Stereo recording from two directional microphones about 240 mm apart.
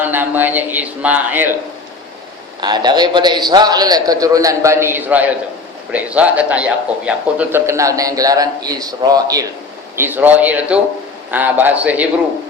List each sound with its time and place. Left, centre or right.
0.0 s a man's voice: centre
2.6 s a man's voice: centre